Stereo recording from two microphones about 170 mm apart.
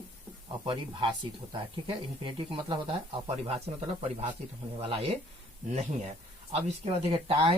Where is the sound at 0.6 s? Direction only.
30° right (ahead or behind).